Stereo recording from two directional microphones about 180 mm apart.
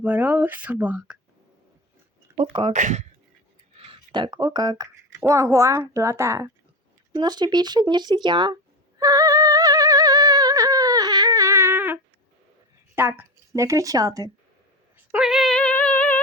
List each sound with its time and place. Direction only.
0.0 s speech: 10° right (ahead or behind)
2.3 s speech: 30° right (ahead or behind)
2.7 s speech: 45° right (ahead or behind)
3.8 s speech: 30° right (ahead or behind)
9.0 s a sound: 20° right (ahead or behind)
13.0 s speech: 10° right (ahead or behind)
14.9 s a sound: 5° right (ahead or behind)